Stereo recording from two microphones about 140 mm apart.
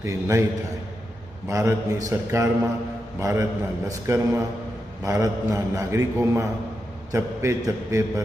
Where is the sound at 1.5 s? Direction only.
20° right (ahead or behind).